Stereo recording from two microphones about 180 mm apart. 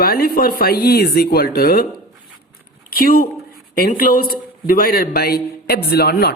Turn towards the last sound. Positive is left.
turn(degrees=60)  # may be behind; listen again after turning